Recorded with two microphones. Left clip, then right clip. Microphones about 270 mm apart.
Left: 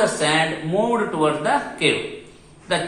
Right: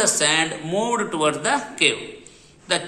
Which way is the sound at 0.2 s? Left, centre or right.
Right.